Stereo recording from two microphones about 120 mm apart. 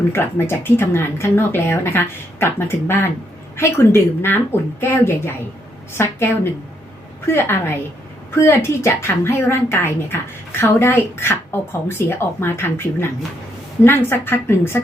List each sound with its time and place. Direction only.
0.1 s a woman's voice: 20° left (ahead or behind)